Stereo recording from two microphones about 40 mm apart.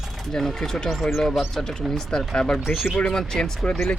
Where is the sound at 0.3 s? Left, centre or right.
Centre.